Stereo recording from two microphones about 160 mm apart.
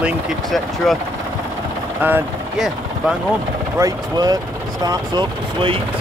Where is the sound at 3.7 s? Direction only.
20° right (ahead or behind).